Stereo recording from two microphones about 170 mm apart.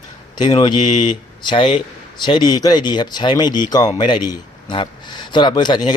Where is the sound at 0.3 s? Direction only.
25° left (ahead or behind).